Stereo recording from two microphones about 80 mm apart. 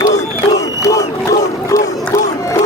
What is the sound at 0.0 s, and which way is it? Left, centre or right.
Crowd, left.